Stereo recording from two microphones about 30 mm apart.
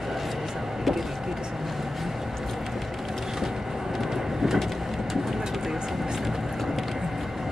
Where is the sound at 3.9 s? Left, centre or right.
Centre.